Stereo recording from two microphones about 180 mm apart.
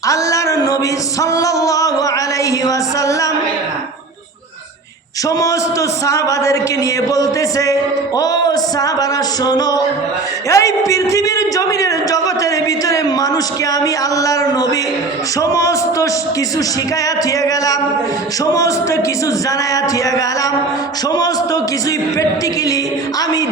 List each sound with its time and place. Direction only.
0.1 s a sound: 15° left (ahead or behind)
1.2 s music: 20° left (ahead or behind)
6.1 s a man's voice: 15° left (ahead or behind)
17.4 s a man's voice: 20° left (ahead or behind)